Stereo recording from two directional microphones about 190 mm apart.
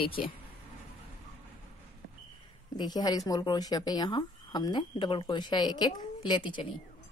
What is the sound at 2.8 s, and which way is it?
Speech, 20° left (ahead or behind).